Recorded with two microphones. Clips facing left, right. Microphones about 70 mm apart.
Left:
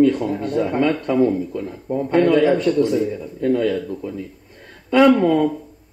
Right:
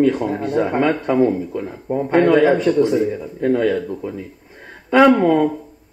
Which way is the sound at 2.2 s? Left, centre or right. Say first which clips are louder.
Right 2 dB; right.